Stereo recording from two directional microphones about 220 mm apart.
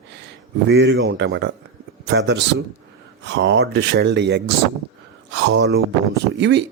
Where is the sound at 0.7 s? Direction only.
55° right (ahead or behind).